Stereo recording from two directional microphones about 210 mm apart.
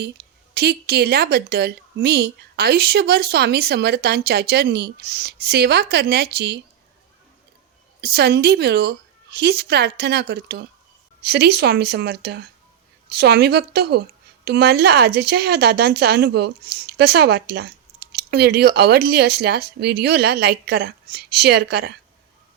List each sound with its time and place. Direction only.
0.5 s a woman's voice: 50° right (ahead or behind)
8.0 s a woman's voice: 50° right (ahead or behind)